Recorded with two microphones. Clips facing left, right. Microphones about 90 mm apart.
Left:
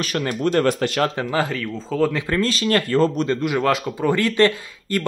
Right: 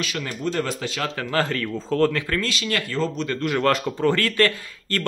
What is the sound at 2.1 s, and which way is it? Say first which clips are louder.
Speech: left 3 dB; 25° left (ahead or behind).